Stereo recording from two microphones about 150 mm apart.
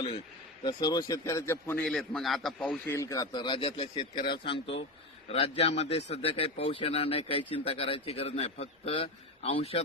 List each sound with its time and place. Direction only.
0.6 s a man's voice: 30° left (ahead or behind)
1.8 s a man's voice: 5° left (ahead or behind)
2.8 s a man's voice: 20° left (ahead or behind); by 9.8 s 40° left (ahead or behind)